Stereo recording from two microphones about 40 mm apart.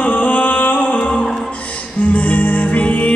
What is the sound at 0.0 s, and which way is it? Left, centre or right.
Music, left.